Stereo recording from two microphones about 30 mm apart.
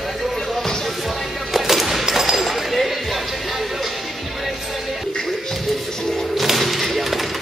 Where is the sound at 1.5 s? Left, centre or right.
Centre.